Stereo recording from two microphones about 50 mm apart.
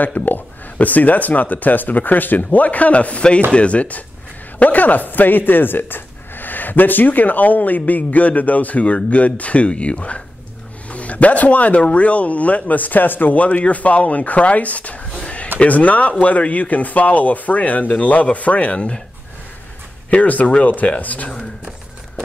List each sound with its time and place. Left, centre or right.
0.0 s speech: left
15.2 s a sound: left
15.6 s speech: left
20.1 s speech: left